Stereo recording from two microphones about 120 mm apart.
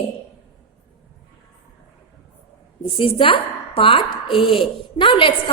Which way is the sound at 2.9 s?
50° left (ahead or behind).